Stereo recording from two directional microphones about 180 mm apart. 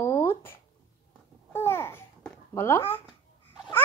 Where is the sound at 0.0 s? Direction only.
15° left (ahead or behind).